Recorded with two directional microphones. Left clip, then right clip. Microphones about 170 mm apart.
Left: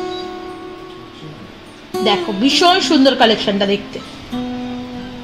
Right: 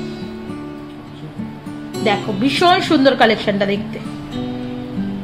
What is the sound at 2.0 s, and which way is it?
A woman's voice, 30° left (ahead or behind).